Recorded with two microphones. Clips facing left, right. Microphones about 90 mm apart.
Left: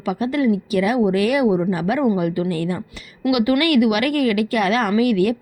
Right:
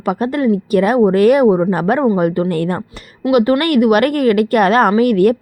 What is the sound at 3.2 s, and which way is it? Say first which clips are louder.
A woman's voice: right 4 dB; 35° right (ahead or behind).